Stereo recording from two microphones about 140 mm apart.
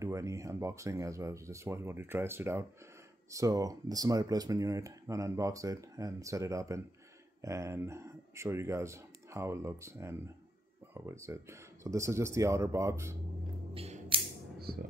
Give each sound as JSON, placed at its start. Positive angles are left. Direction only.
{"t": 0.0, "sound": "speech", "side_deg": -20}
{"t": 13.7, "sound": "scissors", "side_deg": -45}
{"t": 14.6, "sound": "music", "side_deg": -90}